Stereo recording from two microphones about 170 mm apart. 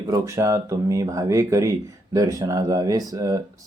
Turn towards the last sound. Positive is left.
turn(degrees=-20)  # may be behind; listen again after turning